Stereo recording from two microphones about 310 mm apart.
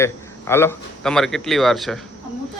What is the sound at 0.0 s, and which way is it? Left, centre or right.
Speech, centre.